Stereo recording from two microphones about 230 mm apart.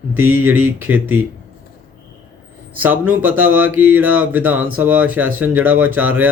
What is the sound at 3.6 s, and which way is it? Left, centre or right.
Speech, right.